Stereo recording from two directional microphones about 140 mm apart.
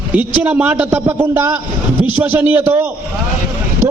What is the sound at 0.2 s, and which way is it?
A man's voice, 10° right (ahead or behind).